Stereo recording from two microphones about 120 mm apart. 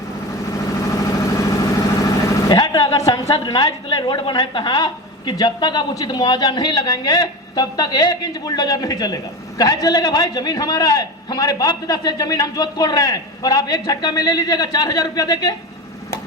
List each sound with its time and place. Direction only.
0.5 s vehicle: 30° left (ahead or behind)
2.5 s a woman's voice: 35° left (ahead or behind)